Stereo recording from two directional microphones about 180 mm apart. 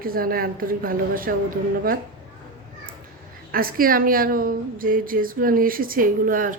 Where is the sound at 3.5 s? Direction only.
55° right (ahead or behind).